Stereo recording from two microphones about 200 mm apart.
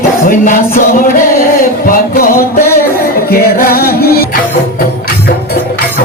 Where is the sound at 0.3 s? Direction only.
40° left (ahead or behind).